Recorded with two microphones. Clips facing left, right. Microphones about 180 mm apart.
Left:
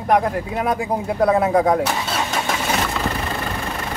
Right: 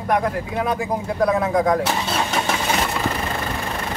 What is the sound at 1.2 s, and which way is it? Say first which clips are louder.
Speech: left 2 dB; 30° left (ahead or behind).